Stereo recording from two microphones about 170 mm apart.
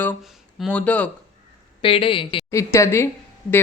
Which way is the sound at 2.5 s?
15° left (ahead or behind).